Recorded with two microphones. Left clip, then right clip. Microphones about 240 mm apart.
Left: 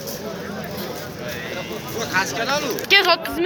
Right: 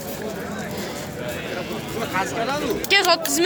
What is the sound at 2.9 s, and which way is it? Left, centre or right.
Speech, centre.